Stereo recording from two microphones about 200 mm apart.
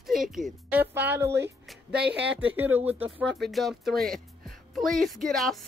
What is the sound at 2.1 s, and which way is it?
Speech, 60° right (ahead or behind).